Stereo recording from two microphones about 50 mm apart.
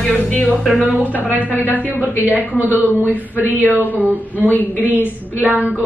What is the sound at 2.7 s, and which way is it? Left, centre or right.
Speech, right.